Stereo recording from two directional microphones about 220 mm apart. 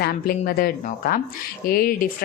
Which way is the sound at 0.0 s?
45° left (ahead or behind).